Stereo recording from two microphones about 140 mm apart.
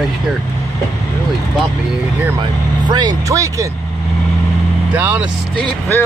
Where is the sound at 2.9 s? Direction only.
30° right (ahead or behind).